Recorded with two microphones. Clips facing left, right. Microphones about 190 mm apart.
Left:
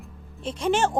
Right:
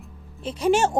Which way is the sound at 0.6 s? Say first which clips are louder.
Right 3 dB; 15° right (ahead or behind).